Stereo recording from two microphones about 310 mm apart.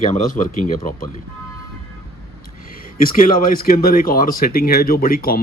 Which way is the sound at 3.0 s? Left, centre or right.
Left.